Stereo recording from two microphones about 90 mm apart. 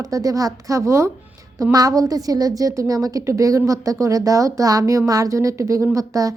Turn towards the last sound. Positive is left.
turn(degrees=-40)  # may be behind; listen again after turning